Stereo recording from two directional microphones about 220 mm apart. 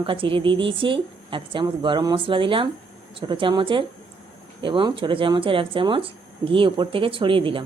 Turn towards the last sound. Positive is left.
turn(degrees=-25)  # may be behind; listen again after turning